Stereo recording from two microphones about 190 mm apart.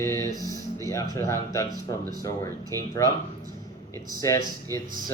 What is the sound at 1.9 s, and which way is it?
Speech, 20° left (ahead or behind).